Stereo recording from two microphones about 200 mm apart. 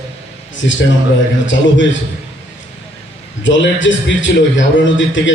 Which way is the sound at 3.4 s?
65° left (ahead or behind).